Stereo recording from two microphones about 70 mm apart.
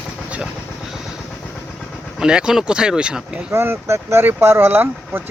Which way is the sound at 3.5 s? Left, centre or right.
Right.